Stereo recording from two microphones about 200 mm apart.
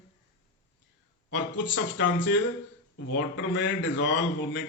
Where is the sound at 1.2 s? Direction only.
60° left (ahead or behind).